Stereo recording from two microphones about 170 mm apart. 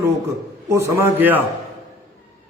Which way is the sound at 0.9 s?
15° right (ahead or behind).